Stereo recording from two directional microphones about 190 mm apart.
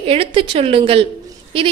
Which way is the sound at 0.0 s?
30° right (ahead or behind).